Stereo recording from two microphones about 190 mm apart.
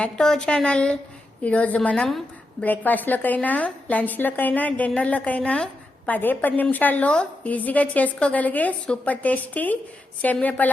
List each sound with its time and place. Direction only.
0.0 s a woman's voice: 5° left (ahead or behind)